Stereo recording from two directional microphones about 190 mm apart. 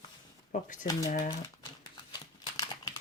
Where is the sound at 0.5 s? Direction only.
40° left (ahead or behind).